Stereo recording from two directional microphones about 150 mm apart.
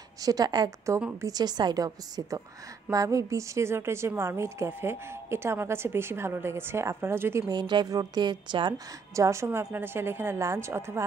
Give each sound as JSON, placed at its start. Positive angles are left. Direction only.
{"t": 0.2, "sound": "a woman's voice", "side_deg": -25}